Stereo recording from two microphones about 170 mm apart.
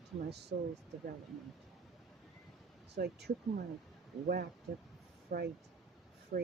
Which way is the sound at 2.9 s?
75° right (ahead or behind).